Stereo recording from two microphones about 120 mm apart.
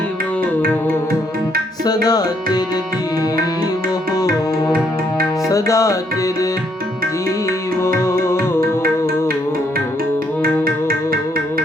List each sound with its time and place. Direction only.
1.8 s tabla: 30° left (ahead or behind)
5.5 s music: 25° left (ahead or behind)
7.8 s music: 20° left (ahead or behind)